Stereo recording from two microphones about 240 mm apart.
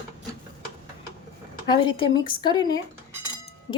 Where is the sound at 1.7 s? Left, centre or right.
Left.